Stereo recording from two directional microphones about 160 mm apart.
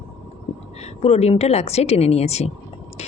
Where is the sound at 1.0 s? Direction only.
40° left (ahead or behind).